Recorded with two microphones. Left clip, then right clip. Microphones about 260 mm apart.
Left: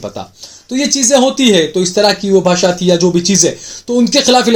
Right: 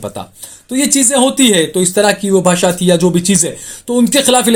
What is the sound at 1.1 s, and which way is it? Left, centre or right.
Speech, right.